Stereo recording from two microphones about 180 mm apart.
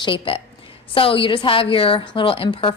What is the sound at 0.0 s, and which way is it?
A woman's voice, 30° left (ahead or behind).